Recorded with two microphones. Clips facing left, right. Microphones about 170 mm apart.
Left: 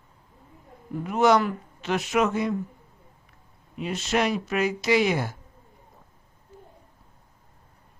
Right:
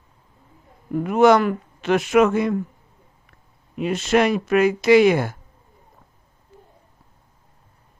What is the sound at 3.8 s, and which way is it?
Speech, 55° right (ahead or behind).